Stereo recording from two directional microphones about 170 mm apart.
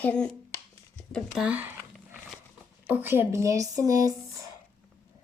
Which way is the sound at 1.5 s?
10° right (ahead or behind).